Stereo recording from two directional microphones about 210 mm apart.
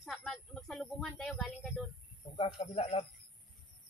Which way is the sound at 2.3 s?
25° left (ahead or behind).